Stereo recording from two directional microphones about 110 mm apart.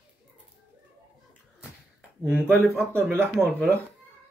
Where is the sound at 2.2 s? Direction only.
15° right (ahead or behind).